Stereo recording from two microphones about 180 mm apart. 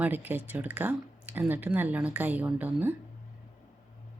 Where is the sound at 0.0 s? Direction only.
10° right (ahead or behind).